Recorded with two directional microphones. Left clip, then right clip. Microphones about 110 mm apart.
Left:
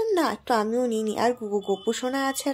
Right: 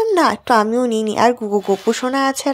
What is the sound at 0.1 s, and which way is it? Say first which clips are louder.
A woman's voice: right 9 dB; 30° right (ahead or behind).